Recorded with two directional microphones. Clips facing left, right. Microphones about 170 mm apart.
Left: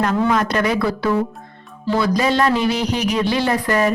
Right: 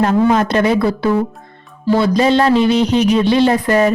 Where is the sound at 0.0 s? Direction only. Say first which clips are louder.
Right 5 dB; 30° right (ahead or behind).